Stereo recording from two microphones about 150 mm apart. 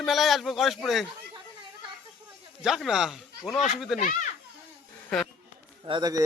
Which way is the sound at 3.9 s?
60° left (ahead or behind).